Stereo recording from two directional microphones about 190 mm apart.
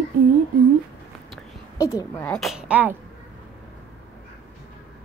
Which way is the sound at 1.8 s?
15° left (ahead or behind).